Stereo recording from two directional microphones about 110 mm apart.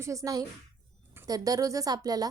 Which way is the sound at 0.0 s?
30° right (ahead or behind).